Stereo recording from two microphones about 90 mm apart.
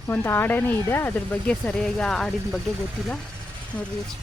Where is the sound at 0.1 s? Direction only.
25° left (ahead or behind).